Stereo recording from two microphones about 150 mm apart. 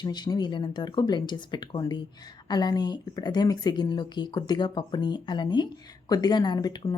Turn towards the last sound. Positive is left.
turn(degrees=25)  # may be behind; listen again after turning